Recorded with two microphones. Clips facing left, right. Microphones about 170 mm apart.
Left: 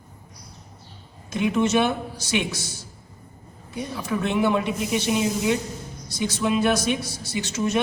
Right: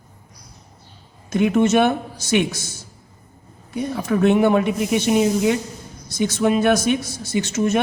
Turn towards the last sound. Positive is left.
turn(degrees=-50)  # may be behind; listen again after turning